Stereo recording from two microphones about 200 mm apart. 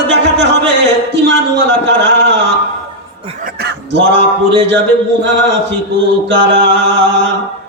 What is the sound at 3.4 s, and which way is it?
Speech, 55° right (ahead or behind).